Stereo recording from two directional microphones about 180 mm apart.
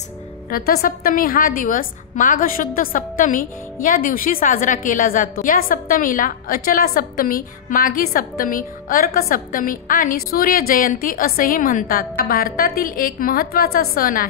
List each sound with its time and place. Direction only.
0.5 s a woman's voice: 55° left (ahead or behind)